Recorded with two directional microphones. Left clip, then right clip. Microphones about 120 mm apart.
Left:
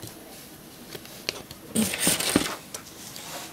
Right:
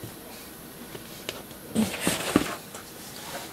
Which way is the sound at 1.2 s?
35° left (ahead or behind).